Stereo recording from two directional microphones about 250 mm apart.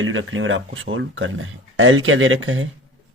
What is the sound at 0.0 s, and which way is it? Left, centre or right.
Speech, right.